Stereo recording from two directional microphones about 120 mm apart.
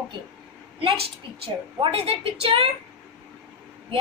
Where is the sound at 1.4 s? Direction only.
50° right (ahead or behind).